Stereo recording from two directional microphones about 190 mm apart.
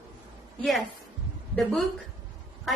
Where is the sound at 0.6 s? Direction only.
Centre (ahead or behind).